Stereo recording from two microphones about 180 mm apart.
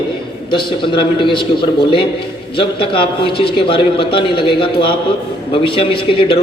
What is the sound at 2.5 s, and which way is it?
A man's voice, 30° left (ahead or behind).